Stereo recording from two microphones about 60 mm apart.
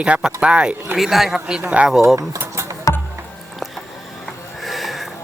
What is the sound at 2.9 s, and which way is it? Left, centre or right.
Music, left.